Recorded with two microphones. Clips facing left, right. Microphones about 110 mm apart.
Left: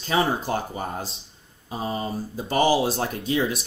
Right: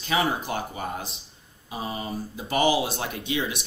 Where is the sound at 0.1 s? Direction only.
35° left (ahead or behind).